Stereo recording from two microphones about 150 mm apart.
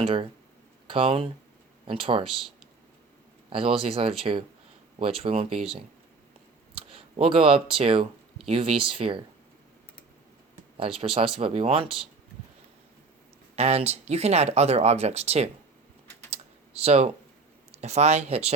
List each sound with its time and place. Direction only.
0.0 s speech: 40° right (ahead or behind)
3.5 s speech: 40° right (ahead or behind)
6.7 s speech: 40° right (ahead or behind)
11.0 s speech: 40° right (ahead or behind)
13.6 s speech: 45° right (ahead or behind)
16.3 s computer keyboard: 45° right (ahead or behind)
17.7 s speech: 45° right (ahead or behind)